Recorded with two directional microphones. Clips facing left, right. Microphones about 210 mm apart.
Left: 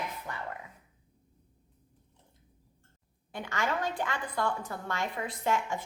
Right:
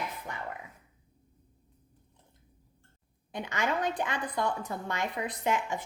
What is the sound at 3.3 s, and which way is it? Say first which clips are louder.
A woman's voice: right 1 dB; 20° right (ahead or behind).